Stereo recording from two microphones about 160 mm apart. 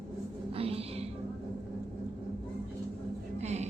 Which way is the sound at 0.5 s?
35° right (ahead or behind).